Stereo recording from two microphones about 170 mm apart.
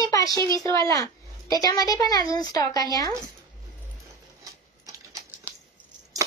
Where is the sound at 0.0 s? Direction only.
20° left (ahead or behind).